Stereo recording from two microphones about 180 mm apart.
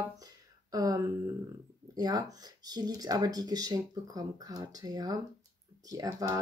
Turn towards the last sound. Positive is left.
turn(degrees=-20)  # may be behind; listen again after turning